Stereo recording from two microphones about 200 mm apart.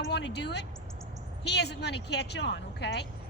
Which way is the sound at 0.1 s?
60° left (ahead or behind).